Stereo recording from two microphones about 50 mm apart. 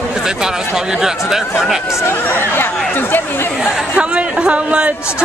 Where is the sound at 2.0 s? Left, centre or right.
Left.